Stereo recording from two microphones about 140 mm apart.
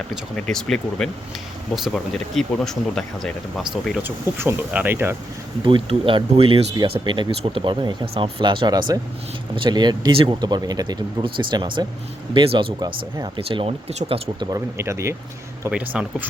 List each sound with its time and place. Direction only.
0.3 s speech: 5° left (ahead or behind)
4.0 s speech: 15° right (ahead or behind)
5.6 s speech: 35° right (ahead or behind)
14.5 s speech: 20° right (ahead or behind)
15.7 s speech: 10° right (ahead or behind)